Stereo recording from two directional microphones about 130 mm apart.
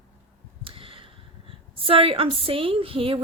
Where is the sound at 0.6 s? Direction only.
45° right (ahead or behind).